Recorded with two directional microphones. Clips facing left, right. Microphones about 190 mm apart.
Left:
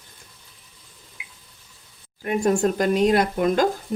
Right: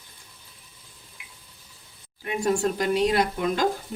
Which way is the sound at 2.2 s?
50° left (ahead or behind).